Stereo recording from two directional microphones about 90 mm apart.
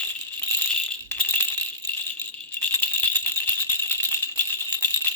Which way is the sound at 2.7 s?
20° left (ahead or behind).